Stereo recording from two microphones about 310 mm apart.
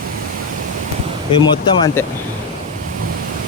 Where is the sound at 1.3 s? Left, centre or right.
Centre.